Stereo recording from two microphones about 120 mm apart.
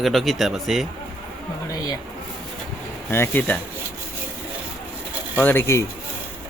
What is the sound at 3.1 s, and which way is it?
Speech, 20° left (ahead or behind).